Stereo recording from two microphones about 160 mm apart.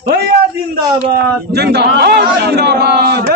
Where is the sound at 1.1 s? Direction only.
90° right.